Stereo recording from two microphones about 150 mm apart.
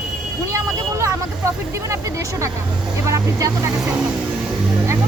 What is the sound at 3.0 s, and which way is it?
Speech, 20° right (ahead or behind).